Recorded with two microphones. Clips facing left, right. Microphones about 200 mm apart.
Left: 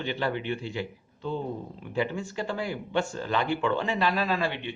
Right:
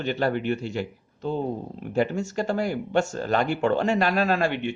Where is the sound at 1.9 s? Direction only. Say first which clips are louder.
Right 5 dB; 45° right (ahead or behind).